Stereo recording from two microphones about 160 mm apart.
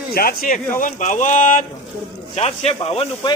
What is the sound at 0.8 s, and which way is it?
Speech, 50° left (ahead or behind).